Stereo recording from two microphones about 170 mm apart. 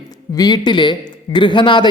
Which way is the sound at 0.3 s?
25° left (ahead or behind).